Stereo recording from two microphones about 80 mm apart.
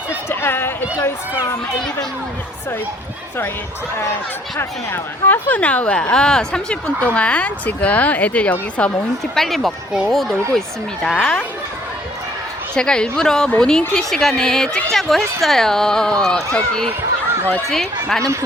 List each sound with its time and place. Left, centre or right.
0.3 s a sound: left
4.9 s speech: left
9.3 s speech: centre
11.1 s speech: centre
12.7 s speech: centre